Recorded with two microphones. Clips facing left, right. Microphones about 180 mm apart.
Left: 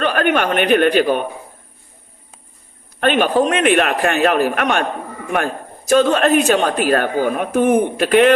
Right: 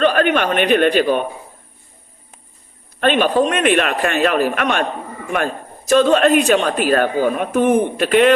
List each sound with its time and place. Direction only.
0.0 s a sound: 50° left (ahead or behind)
0.5 s a woman's voice: 45° left (ahead or behind)
3.0 s a man's voice: 45° left (ahead or behind)
5.9 s a woman's voice: 45° left (ahead or behind)